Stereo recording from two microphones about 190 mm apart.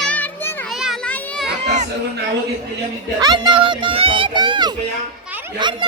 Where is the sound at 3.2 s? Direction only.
20° right (ahead or behind).